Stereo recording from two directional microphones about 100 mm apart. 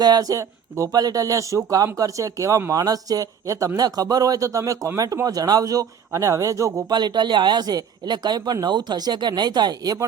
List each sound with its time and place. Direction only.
0.0 s speech: 40° right (ahead or behind)
6.8 s speech: 45° right (ahead or behind)